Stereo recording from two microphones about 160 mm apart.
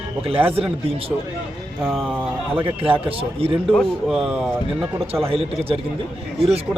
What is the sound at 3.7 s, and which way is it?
Speech, centre (ahead or behind).